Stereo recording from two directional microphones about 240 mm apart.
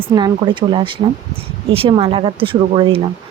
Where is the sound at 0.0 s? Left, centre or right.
Centre.